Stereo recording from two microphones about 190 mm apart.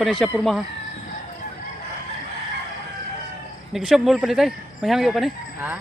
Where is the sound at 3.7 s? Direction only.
Centre (ahead or behind).